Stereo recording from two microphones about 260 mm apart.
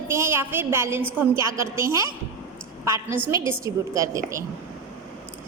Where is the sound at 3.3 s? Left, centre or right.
Centre.